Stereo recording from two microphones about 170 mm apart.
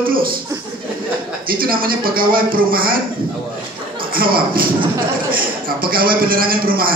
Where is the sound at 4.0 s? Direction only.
60° right (ahead or behind).